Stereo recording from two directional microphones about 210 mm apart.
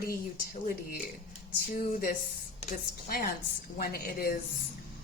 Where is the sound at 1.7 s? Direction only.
40° left (ahead or behind).